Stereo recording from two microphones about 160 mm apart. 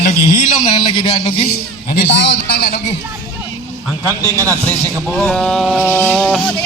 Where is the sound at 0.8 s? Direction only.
35° left (ahead or behind).